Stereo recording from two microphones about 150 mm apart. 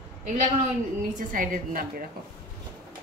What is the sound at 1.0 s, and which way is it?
Speech, 60° right (ahead or behind).